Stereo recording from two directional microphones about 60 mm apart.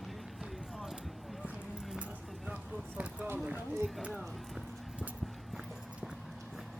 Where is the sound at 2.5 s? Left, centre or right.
Right.